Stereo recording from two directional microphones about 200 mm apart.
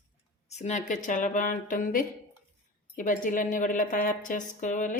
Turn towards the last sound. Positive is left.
turn(degrees=40)  # may be behind; listen again after turning